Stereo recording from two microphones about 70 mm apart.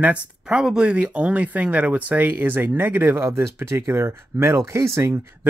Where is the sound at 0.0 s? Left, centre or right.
Centre.